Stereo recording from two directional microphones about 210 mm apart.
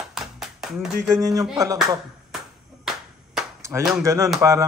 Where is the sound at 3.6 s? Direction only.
15° right (ahead or behind).